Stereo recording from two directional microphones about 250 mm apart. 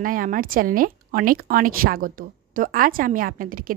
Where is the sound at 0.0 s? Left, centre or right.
Right.